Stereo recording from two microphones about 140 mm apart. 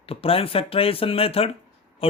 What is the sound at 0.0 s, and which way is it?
Speech, 40° left (ahead or behind).